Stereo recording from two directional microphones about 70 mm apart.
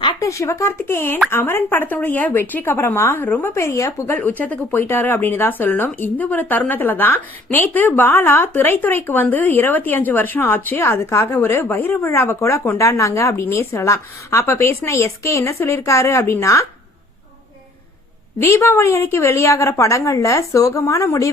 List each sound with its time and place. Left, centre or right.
0.2 s a woman's voice: left
3.5 s speech: left
12.4 s a woman's voice: left
18.3 s a woman's voice: left